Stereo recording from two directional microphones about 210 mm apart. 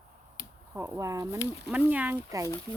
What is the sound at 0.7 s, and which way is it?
Speech, 10° right (ahead or behind).